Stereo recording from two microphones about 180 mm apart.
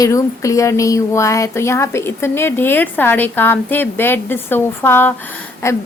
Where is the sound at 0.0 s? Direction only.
20° left (ahead or behind).